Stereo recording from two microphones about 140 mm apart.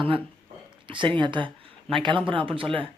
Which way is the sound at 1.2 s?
35° right (ahead or behind).